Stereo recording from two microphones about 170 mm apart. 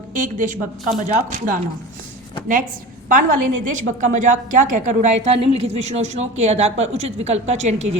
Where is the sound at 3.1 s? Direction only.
50° right (ahead or behind).